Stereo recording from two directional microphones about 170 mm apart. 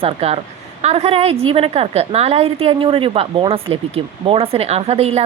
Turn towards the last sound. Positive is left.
turn(degrees=-35)  # may be behind; listen again after turning